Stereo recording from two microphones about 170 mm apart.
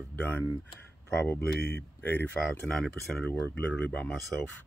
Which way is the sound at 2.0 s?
10° left (ahead or behind).